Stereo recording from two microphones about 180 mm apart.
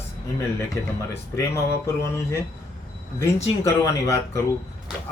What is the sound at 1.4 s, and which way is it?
Speech, 15° left (ahead or behind).